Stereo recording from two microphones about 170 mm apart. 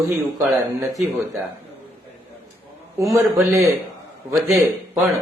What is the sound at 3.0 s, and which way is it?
Speech, 20° right (ahead or behind).